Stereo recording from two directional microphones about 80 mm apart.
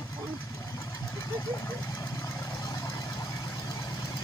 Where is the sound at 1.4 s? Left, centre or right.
Left.